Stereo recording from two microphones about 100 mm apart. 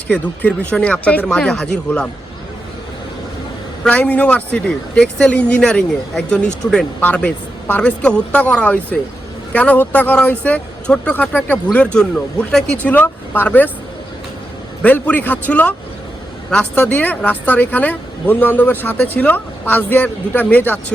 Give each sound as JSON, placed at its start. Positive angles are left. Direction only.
{"t": 0.1, "sound": "speech", "side_deg": 15}
{"t": 3.8, "sound": "speech", "side_deg": 15}
{"t": 14.8, "sound": "speech", "side_deg": 15}